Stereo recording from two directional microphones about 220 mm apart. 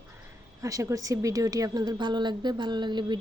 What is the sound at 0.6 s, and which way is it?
A woman's voice, 15° right (ahead or behind).